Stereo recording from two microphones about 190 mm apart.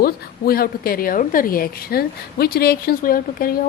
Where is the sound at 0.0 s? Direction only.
50° left (ahead or behind).